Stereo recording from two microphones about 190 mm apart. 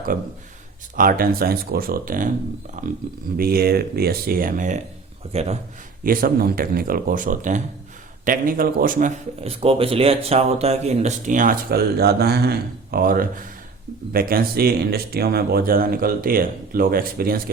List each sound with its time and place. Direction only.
0.9 s a man's voice: 50° right (ahead or behind)
6.0 s speech: 50° right (ahead or behind)